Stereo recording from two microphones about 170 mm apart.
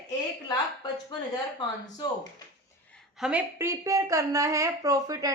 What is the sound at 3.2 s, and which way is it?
A woman's voice, 5° right (ahead or behind).